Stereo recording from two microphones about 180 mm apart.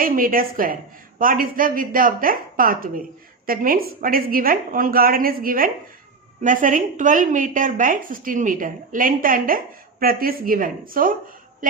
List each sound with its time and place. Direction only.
0.0 s speech: 50° right (ahead or behind)